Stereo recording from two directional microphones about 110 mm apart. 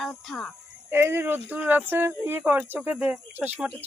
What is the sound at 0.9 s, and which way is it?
Speech, 20° right (ahead or behind).